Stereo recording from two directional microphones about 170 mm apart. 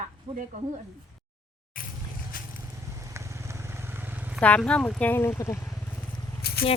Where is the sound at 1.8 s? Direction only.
55° left (ahead or behind).